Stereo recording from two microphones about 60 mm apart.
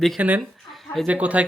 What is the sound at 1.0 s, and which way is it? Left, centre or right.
Speech, right.